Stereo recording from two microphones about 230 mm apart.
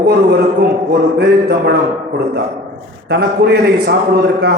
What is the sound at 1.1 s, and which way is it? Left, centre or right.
Speech, right.